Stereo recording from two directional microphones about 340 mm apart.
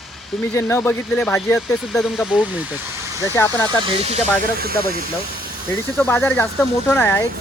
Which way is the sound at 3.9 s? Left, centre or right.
Centre.